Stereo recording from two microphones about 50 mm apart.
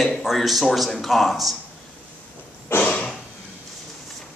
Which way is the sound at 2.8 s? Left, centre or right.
Left.